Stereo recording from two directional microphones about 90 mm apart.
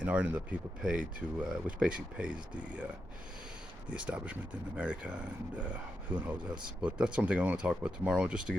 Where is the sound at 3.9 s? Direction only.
15° right (ahead or behind).